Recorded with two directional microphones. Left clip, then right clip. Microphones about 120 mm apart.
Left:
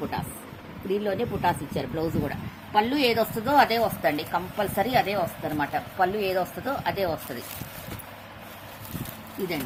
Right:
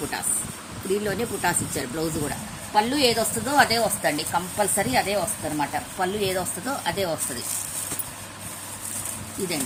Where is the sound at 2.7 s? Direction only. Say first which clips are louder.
Right 2 dB; 40° left (ahead or behind).